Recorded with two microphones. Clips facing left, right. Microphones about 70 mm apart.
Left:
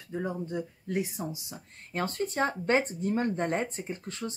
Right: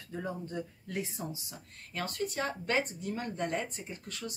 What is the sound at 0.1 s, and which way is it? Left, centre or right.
Speech, centre.